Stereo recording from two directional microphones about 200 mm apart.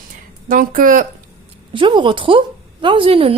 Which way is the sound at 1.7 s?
25° right (ahead or behind).